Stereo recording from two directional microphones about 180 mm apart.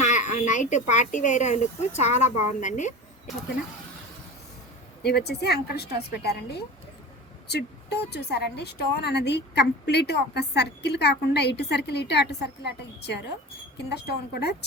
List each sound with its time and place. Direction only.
0.0 s speech: 40° left (ahead or behind)
5.0 s a woman's voice: 65° left (ahead or behind)